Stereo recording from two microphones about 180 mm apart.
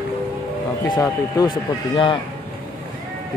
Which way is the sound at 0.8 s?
20° left (ahead or behind).